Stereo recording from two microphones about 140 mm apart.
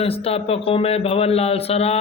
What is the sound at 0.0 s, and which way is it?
A man's voice, 45° left (ahead or behind).